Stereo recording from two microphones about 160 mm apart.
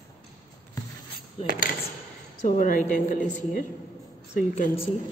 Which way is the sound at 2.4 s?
55° left (ahead or behind).